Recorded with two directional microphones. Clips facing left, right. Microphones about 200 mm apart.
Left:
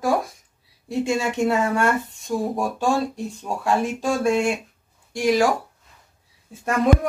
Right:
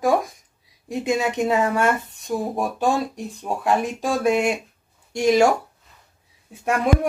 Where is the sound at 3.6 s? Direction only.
15° right (ahead or behind).